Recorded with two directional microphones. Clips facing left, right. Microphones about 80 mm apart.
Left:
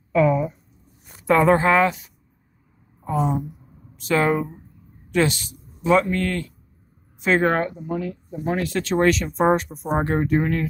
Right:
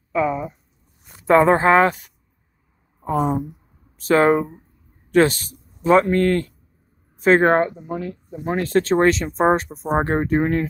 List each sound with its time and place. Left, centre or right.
0.1 s a sound: centre
1.2 s speech: right
3.1 s a woman's voice: right
3.9 s speech: right
7.8 s speech: right
8.5 s speech: right